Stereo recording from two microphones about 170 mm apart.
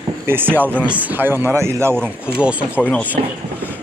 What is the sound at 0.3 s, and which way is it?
Speech, 10° right (ahead or behind).